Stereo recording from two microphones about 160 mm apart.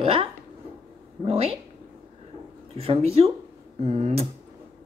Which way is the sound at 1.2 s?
35° right (ahead or behind).